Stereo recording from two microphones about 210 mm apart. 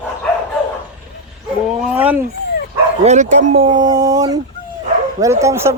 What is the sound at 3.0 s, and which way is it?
Speech, 35° right (ahead or behind).